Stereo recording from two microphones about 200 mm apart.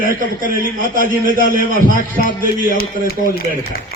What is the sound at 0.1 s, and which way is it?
A man's voice, 45° right (ahead or behind).